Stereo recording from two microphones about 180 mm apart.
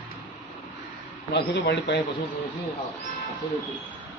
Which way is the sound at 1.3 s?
70° left (ahead or behind).